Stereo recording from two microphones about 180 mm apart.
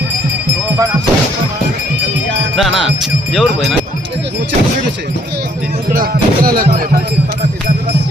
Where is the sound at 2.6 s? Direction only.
Centre (ahead or behind).